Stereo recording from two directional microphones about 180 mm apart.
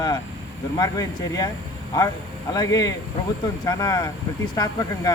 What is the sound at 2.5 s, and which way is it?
Speech, 20° left (ahead or behind).